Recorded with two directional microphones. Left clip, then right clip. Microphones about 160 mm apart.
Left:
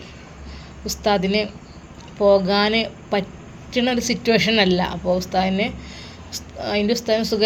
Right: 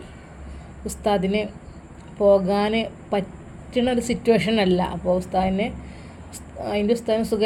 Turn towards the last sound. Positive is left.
turn(degrees=-10)  # may be behind; listen again after turning